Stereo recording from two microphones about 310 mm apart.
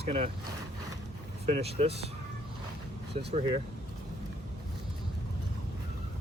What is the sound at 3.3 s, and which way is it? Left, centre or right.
Speech, centre.